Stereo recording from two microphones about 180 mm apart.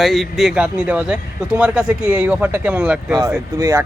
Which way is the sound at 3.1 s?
20° right (ahead or behind).